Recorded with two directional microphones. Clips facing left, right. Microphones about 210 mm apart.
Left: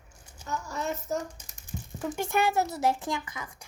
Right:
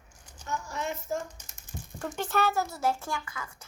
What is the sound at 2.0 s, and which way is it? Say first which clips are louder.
A woman's voice: left 1 dB; 10° left (ahead or behind).